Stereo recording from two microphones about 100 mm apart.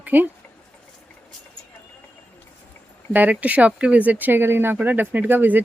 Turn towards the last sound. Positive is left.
turn(degrees=-20)  # may be behind; listen again after turning